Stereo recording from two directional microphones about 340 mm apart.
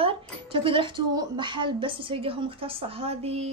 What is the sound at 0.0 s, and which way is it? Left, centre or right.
Speech, centre.